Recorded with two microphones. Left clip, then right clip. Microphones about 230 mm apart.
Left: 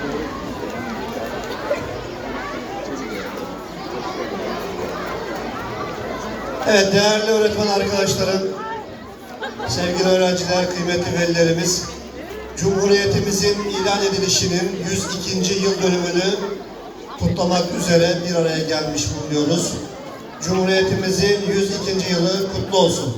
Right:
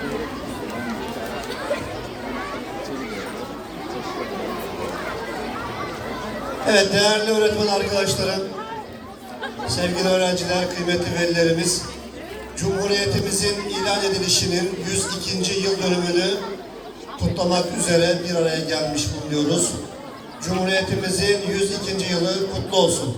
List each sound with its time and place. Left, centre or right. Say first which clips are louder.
6.7 s music: left 2 dB; centre
9.7 s music: left 3 dB; centre